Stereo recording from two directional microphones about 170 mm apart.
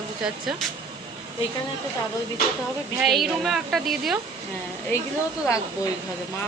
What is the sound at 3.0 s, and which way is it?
Speech, centre (ahead or behind).